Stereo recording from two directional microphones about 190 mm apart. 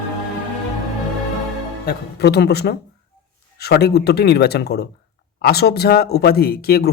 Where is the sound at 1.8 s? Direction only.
60° left (ahead or behind).